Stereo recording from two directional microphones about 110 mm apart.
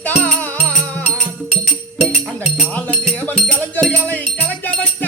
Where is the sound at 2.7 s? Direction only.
15° left (ahead or behind).